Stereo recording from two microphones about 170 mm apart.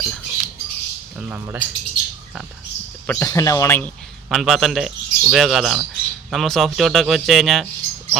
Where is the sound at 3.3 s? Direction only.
20° left (ahead or behind).